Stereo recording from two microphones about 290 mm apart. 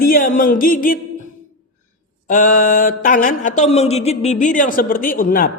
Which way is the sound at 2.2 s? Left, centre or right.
Left.